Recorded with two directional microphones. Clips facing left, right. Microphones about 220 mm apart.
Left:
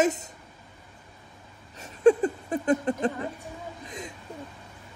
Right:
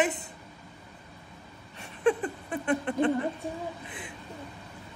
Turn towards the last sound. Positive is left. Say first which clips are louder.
# left 2 dB
turn(degrees=40)  # may be behind; listen again after turning